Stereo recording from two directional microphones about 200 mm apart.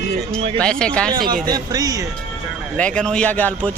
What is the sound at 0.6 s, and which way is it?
Speech, 5° left (ahead or behind).